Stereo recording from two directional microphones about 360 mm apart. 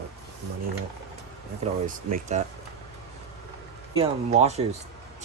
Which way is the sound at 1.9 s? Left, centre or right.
Right.